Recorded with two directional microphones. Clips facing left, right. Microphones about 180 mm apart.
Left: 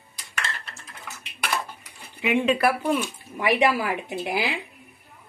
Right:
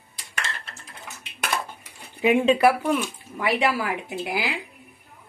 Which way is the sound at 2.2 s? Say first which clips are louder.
Right 3 dB; 35° right (ahead or behind).